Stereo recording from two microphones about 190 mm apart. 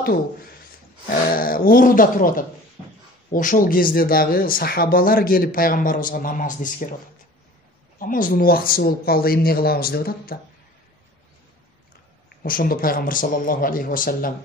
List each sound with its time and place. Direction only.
1.3 s speech: 50° left (ahead or behind)
8.0 s speech: 45° left (ahead or behind)
12.4 s speech: 50° left (ahead or behind)